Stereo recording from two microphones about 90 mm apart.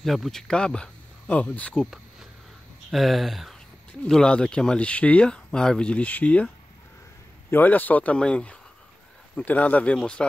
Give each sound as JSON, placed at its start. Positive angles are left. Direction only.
{"t": 0.0, "sound": "speech", "side_deg": 0}
{"t": 2.9, "sound": "speech", "side_deg": 0}
{"t": 4.0, "sound": "speech", "side_deg": 10}
{"t": 7.5, "sound": "speech", "side_deg": 20}